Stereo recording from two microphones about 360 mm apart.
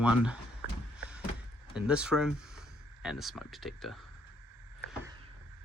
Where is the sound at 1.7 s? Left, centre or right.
Centre.